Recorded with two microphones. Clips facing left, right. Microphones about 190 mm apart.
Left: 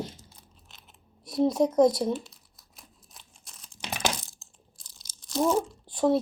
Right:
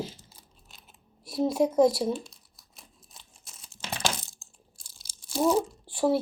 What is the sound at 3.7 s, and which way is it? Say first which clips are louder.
Crumpling: left 1 dB; 15° left (ahead or behind).